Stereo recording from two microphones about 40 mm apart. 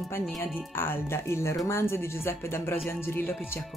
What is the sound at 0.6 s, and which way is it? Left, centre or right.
Speech, left.